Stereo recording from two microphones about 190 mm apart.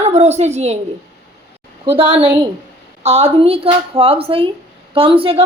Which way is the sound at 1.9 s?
30° right (ahead or behind).